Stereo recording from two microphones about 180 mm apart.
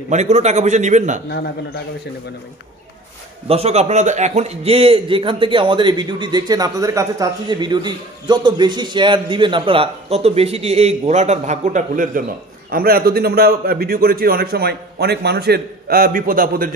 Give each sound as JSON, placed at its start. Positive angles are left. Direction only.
{"t": 0.1, "sound": "a man's voice", "side_deg": -40}
{"t": 3.4, "sound": "a man's voice", "side_deg": -35}